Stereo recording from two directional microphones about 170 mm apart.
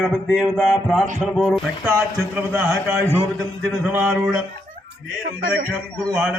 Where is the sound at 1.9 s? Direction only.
10° right (ahead or behind).